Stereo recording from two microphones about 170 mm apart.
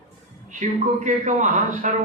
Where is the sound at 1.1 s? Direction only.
45° right (ahead or behind).